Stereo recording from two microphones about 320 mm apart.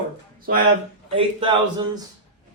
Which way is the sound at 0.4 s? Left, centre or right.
Right.